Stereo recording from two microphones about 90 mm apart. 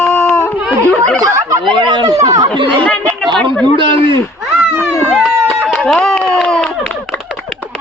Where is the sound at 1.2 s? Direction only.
40° right (ahead or behind).